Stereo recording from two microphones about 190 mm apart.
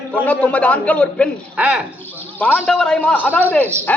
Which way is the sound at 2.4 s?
5° left (ahead or behind).